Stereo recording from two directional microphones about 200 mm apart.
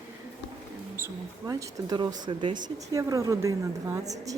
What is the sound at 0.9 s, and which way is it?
A woman's voice, 15° right (ahead or behind).